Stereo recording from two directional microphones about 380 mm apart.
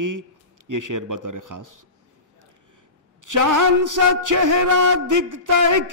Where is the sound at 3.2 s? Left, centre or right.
Right.